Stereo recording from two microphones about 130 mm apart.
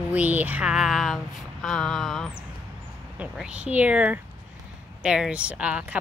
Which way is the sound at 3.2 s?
10° right (ahead or behind).